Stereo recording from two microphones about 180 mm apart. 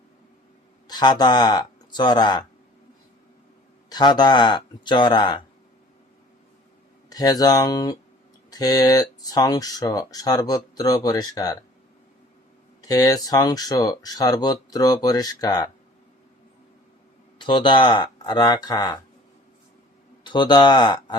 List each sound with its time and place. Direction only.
0.9 s speech: 25° left (ahead or behind)
3.8 s speech: 25° left (ahead or behind)
7.1 s speech: 20° left (ahead or behind)
12.9 s speech: 20° left (ahead or behind)
17.3 s speech: 25° left (ahead or behind)
20.2 s speech: 25° left (ahead or behind)